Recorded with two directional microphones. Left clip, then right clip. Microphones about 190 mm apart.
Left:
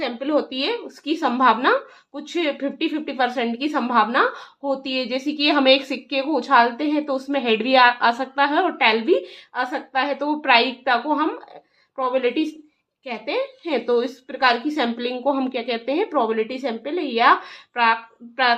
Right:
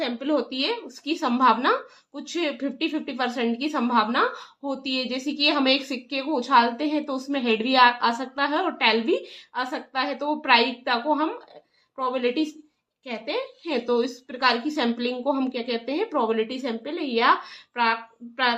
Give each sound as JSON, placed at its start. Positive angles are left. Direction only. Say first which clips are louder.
{"t": 0.0, "sound": "speech", "louder": "left 3 dB", "side_deg": 30}